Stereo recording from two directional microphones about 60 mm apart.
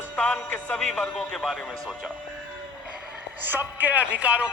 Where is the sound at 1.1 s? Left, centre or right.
Centre.